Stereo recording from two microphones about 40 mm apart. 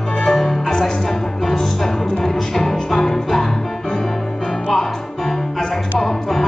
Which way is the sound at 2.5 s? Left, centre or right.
Centre.